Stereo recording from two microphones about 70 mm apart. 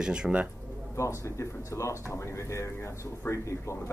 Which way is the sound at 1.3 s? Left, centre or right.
Left.